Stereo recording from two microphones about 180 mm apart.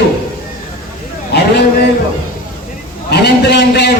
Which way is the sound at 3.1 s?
65° left (ahead or behind).